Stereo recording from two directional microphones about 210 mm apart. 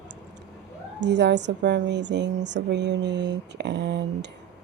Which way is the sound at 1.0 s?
55° right (ahead or behind).